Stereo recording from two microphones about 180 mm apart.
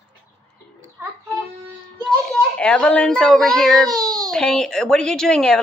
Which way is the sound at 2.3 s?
5° left (ahead or behind).